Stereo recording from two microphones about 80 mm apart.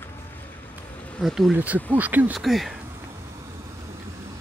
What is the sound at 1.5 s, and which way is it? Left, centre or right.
Speech, centre.